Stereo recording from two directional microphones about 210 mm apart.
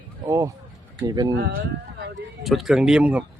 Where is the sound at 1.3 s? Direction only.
50° right (ahead or behind).